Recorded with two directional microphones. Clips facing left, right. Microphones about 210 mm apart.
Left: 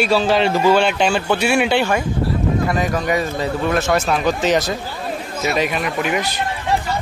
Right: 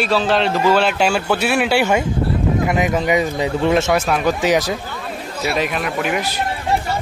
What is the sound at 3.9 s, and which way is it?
Speech, 5° right (ahead or behind).